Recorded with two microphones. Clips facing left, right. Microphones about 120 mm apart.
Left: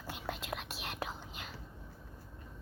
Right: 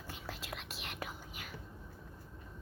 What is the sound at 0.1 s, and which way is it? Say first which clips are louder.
Whispering: left 6 dB; 70° left (ahead or behind).